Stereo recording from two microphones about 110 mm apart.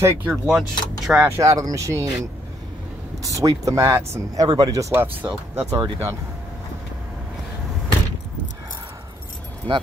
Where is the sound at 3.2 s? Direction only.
30° right (ahead or behind).